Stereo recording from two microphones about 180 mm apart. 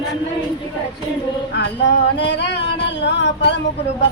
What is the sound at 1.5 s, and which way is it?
Music, 75° left (ahead or behind).